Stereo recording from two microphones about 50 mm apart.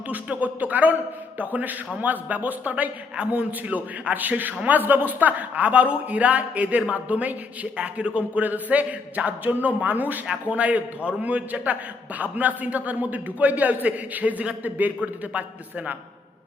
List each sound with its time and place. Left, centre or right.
0.1 s a man's voice: right